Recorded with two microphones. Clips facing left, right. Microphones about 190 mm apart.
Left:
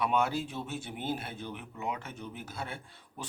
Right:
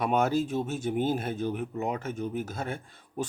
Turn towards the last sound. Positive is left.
turn(degrees=-45)  # may be behind; listen again after turning